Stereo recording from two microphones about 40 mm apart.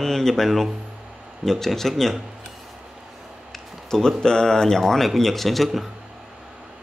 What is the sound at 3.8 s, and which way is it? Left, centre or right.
Speech, centre.